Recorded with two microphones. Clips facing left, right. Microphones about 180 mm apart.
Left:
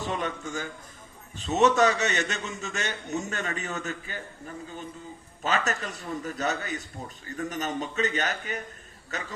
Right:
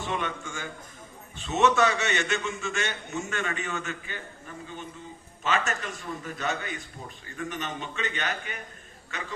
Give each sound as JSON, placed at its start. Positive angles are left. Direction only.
{"t": 0.0, "sound": "a man's voice", "side_deg": 40}
{"t": 5.4, "sound": "a man's voice", "side_deg": 40}